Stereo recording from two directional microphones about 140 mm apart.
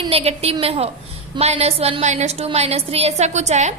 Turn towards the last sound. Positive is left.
turn(degrees=-55)  # may be behind; listen again after turning